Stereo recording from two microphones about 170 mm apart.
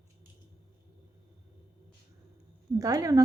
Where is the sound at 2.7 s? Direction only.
20° right (ahead or behind).